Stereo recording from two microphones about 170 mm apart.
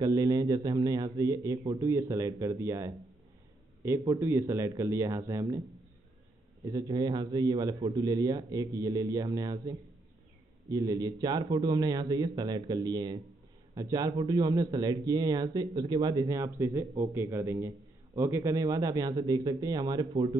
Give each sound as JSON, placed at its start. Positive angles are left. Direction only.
{"t": 0.0, "sound": "a man's voice", "side_deg": -20}
{"t": 6.6, "sound": "a man's voice", "side_deg": -25}